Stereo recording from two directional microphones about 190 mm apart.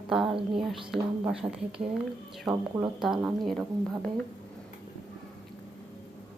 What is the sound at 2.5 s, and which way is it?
Speech, 20° right (ahead or behind).